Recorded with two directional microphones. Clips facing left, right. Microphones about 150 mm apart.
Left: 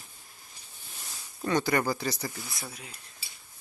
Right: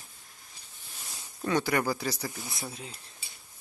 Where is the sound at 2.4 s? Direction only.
20° right (ahead or behind).